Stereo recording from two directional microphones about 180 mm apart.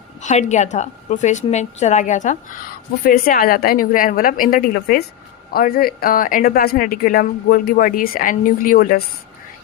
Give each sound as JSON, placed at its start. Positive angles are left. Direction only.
{"t": 0.2, "sound": "a woman's voice", "side_deg": 40}